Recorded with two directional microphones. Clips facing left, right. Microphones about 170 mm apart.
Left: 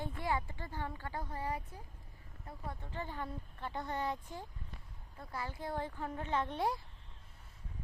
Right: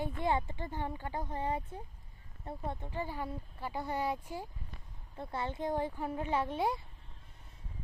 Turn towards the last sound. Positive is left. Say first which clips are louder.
# right 2 dB
turn(degrees=0)  # may be behind; listen again after turning